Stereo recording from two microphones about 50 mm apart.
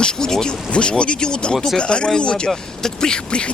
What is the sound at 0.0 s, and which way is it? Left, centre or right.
Speech, centre.